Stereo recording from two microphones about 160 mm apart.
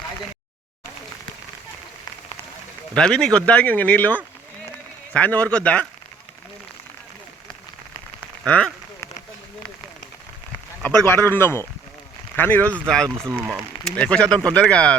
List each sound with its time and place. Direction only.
2.9 s speech: 5° left (ahead or behind)
8.4 s speech: 5° left (ahead or behind)
10.8 s speech: 15° left (ahead or behind)
13.1 s speech: 15° right (ahead or behind)
13.8 s speech: 5° left (ahead or behind)